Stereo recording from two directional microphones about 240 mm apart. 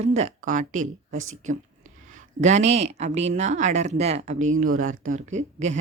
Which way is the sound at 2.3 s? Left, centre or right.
Right.